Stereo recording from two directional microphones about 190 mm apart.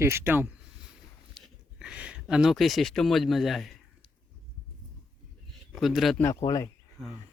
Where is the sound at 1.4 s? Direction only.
Centre (ahead or behind).